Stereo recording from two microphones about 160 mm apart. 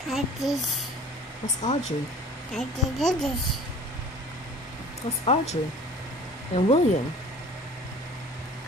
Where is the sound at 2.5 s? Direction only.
5° left (ahead or behind).